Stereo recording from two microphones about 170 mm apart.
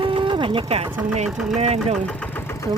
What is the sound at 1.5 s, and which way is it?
Speech, 40° right (ahead or behind).